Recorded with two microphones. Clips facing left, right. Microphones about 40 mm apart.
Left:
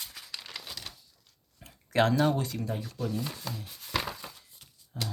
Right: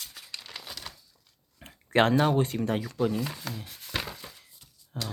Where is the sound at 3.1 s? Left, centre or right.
Right.